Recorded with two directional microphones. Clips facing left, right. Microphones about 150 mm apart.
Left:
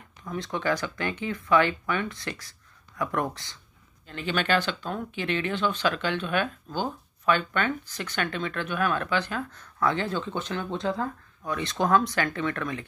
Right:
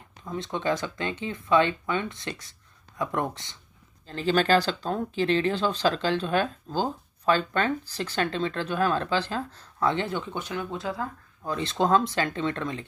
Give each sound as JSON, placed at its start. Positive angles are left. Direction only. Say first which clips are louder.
{"t": 0.2, "sound": "speech", "louder": "even", "side_deg": -25}
{"t": 4.1, "sound": "speech", "louder": "right 4 dB", "side_deg": -35}
{"t": 11.4, "sound": "speech", "louder": "right 1 dB", "side_deg": -30}